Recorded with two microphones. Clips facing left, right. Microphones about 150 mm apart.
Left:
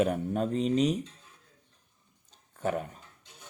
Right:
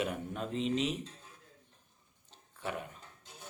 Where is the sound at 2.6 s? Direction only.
45° left (ahead or behind).